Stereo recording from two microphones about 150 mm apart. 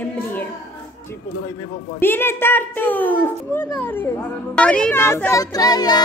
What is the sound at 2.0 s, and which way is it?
A woman's voice, 15° left (ahead or behind).